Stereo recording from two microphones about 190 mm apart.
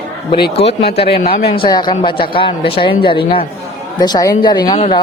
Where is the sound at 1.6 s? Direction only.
25° left (ahead or behind).